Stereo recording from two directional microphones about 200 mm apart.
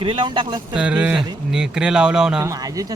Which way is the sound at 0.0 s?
25° right (ahead or behind).